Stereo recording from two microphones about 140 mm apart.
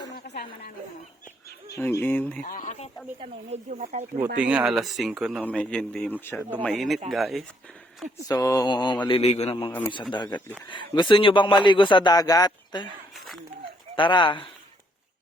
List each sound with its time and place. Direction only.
1.7 s speech: 20° left (ahead or behind)
2.4 s speech: 75° left (ahead or behind); by 2.9 s 55° left (ahead or behind)
3.7 s speech: 60° right (ahead or behind)
4.4 s speech: 10° right (ahead or behind)
5.5 s speech: 5° left (ahead or behind)
6.7 s speech: centre (ahead or behind)
8.3 s a man's voice: 20° left (ahead or behind)
9.2 s a man's voice: 50° left (ahead or behind); by 12.9 s 30° left (ahead or behind)
13.1 s a sound: centre (ahead or behind)
13.9 s a man's voice: 35° left (ahead or behind)